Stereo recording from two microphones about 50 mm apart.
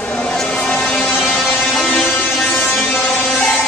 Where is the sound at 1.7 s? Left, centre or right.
Centre.